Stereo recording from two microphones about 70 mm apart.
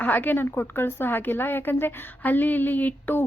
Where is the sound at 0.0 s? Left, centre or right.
Left.